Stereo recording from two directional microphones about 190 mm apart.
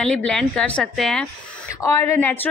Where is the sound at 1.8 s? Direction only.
15° left (ahead or behind).